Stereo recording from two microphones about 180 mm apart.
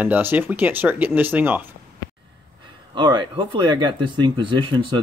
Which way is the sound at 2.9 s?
25° right (ahead or behind).